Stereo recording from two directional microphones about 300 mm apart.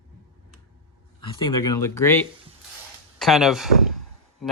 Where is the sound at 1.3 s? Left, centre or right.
Centre.